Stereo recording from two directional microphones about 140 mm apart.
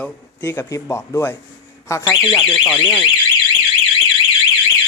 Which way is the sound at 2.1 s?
Centre (ahead or behind).